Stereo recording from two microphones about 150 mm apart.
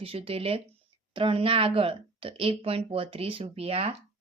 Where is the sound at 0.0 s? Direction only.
40° right (ahead or behind).